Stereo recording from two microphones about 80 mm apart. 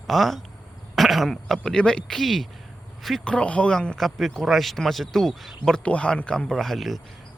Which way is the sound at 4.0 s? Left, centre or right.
Centre.